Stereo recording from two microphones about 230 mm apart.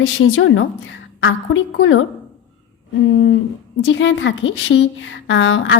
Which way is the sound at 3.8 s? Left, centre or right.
Left.